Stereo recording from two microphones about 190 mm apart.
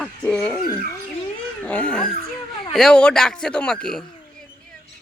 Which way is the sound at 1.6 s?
5° left (ahead or behind).